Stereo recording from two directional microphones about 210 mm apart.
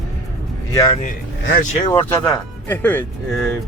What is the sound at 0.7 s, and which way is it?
Speech, 20° left (ahead or behind).